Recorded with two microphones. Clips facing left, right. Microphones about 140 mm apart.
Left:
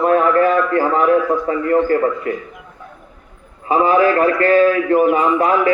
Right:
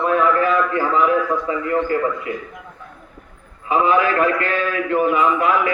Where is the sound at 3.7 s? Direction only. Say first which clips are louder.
Left 4 dB; 40° left (ahead or behind).